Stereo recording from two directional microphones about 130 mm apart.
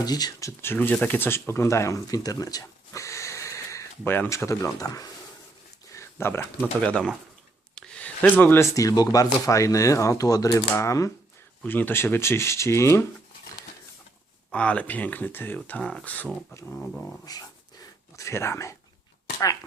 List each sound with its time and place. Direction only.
0.0 s speech: 30° left (ahead or behind)
5.9 s a sound: 20° left (ahead or behind)
6.6 s speech: 5° left (ahead or behind)
7.8 s a sound: 10° left (ahead or behind)
8.7 s speech: 25° left (ahead or behind)
14.5 s speech: 10° left (ahead or behind)
18.2 s speech: 20° left (ahead or behind)